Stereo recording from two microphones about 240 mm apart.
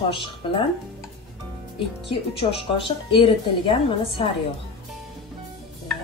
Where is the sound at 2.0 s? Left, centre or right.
Left.